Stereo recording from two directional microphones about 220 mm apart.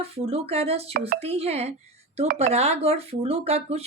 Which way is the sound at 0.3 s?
25° right (ahead or behind).